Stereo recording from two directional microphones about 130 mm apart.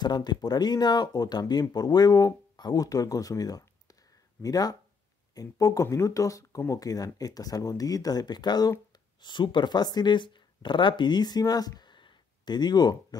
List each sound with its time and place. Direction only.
0.0 s speech: 35° left (ahead or behind)